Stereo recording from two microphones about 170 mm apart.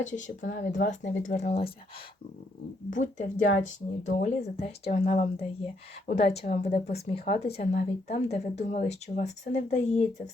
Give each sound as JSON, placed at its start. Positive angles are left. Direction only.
{"t": 0.0, "sound": "speech", "side_deg": 45}
{"t": 2.9, "sound": "speech", "side_deg": 45}